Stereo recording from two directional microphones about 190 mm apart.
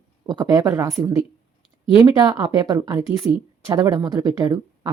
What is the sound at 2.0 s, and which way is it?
A woman's voice, 15° right (ahead or behind).